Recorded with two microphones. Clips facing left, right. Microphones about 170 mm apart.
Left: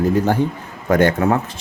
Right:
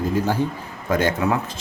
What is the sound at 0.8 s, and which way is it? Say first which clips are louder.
Speech: left 5 dB; 60° left (ahead or behind).